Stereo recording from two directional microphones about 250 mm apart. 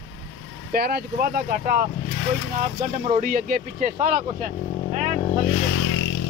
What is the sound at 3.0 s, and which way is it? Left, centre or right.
Speech, right.